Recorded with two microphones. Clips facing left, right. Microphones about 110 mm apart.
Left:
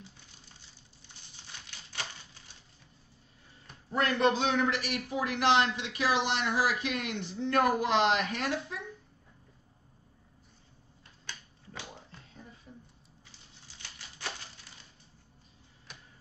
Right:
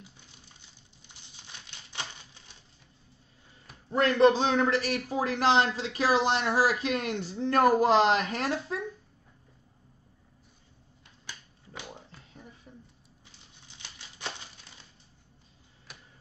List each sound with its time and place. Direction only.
1.3 s crumpling: 20° right (ahead or behind)
3.9 s a man's voice: 25° right (ahead or behind)
11.2 s finger snapping: 10° right (ahead or behind)
13.7 s a sound: 20° right (ahead or behind)